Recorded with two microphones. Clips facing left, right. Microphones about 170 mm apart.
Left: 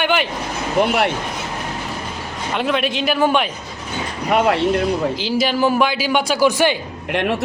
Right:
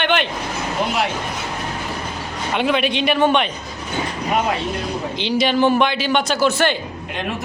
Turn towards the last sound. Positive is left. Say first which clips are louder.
# left 2 dB
turn(degrees=10)  # may be behind; listen again after turning